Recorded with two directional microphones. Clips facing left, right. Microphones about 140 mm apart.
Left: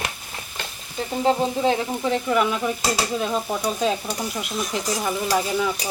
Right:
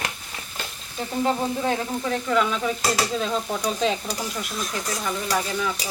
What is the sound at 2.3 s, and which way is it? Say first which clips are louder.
Sizzle: right 1 dB; 10° left (ahead or behind).